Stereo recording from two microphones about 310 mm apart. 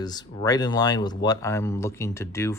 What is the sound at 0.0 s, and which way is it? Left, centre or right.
Speech, centre.